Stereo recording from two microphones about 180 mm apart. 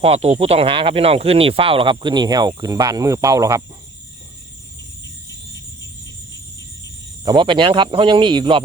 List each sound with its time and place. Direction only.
0.0 s speech: 35° right (ahead or behind); by 3.6 s 20° right (ahead or behind)
7.3 s speech: 25° right (ahead or behind)